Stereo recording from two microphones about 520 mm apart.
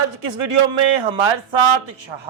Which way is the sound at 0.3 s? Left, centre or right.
Right.